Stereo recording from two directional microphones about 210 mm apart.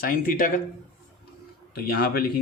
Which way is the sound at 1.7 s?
45° left (ahead or behind).